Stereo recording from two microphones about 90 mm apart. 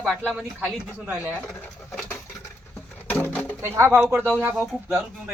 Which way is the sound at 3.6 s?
30° right (ahead or behind).